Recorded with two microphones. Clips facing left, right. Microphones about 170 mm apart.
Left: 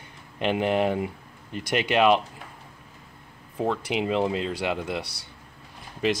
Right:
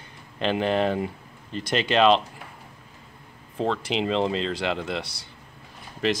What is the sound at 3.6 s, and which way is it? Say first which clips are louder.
A man's voice: right 1 dB; 10° left (ahead or behind).